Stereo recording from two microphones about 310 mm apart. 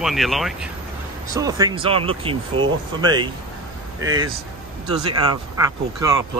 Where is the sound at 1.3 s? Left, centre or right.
Centre.